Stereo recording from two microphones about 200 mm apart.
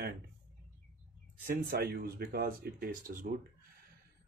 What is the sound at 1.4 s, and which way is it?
Speech, 50° right (ahead or behind).